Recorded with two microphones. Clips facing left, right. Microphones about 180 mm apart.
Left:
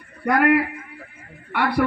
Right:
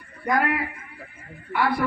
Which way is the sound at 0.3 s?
75° left (ahead or behind).